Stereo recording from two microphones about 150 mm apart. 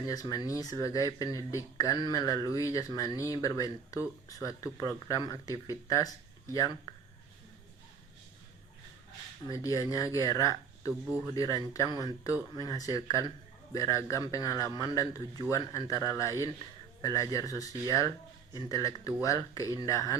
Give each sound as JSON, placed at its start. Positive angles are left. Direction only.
{"t": 0.1, "sound": "speech", "side_deg": 25}
{"t": 6.9, "sound": "a sound", "side_deg": 25}
{"t": 9.5, "sound": "speech", "side_deg": 20}